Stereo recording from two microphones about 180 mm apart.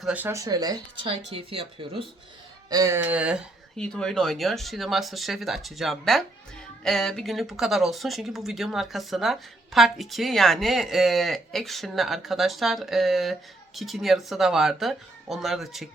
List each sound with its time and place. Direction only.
0.0 s speech: 10° right (ahead or behind); by 2.0 s 30° right (ahead or behind)
2.6 s speech: 20° right (ahead or behind); by 15.9 s centre (ahead or behind)